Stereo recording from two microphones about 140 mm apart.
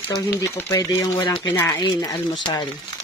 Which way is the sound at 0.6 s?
25° left (ahead or behind).